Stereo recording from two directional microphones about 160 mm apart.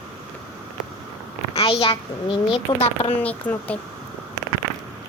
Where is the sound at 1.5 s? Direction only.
35° left (ahead or behind).